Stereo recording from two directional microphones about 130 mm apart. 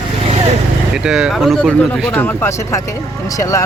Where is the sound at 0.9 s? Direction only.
5° right (ahead or behind).